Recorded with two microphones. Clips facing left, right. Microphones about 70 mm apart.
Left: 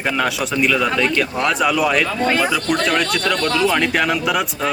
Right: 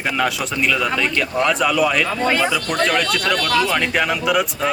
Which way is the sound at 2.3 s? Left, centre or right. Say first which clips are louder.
Even; centre.